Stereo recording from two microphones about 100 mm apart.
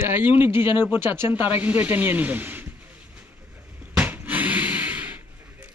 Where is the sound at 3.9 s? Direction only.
15° right (ahead or behind).